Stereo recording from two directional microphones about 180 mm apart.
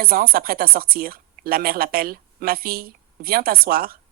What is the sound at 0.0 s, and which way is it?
Speech, 55° right (ahead or behind).